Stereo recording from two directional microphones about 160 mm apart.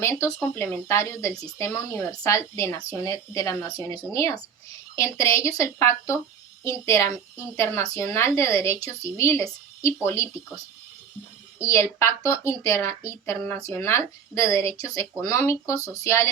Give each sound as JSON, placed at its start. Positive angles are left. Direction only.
{"t": 0.0, "sound": "a woman's voice", "side_deg": 20}
{"t": 11.6, "sound": "a woman's voice", "side_deg": 15}